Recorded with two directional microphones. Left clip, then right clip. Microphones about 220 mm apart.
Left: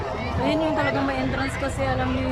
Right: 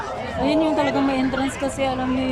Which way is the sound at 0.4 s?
15° right (ahead or behind).